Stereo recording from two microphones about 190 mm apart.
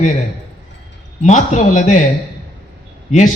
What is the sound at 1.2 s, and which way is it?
Speech, 40° left (ahead or behind).